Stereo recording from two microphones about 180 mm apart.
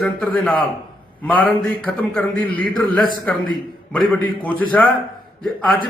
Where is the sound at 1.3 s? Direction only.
5° left (ahead or behind).